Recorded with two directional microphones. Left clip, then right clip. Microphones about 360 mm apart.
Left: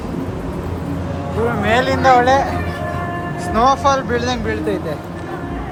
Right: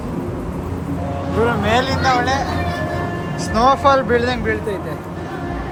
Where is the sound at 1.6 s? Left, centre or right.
Centre.